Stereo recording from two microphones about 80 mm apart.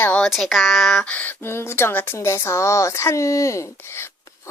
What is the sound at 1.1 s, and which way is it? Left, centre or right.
Speech, left.